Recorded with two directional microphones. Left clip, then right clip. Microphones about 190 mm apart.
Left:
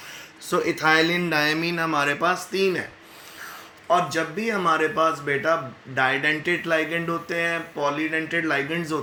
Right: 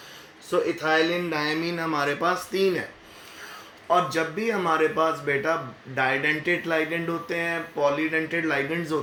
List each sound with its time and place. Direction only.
0.5 s speech: 60° left (ahead or behind)
1.2 s speech: 35° left (ahead or behind); by 2.8 s 10° left (ahead or behind)
3.8 s speech: 15° left (ahead or behind)